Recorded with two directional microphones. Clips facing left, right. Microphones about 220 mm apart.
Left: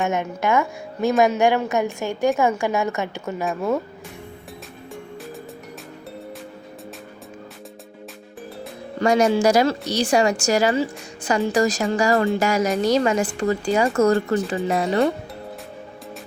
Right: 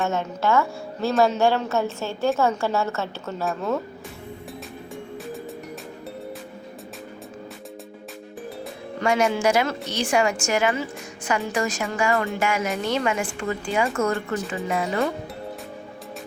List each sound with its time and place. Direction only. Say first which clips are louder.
0.0 s a woman's voice: left 1 dB; 15° left (ahead or behind)
9.0 s a woman's voice: left 5 dB; 40° left (ahead or behind)